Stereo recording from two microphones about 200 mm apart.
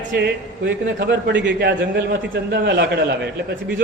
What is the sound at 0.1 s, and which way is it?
A man's voice, 55° right (ahead or behind).